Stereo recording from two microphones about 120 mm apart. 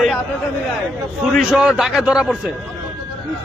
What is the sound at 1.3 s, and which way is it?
A man's voice, 5° right (ahead or behind).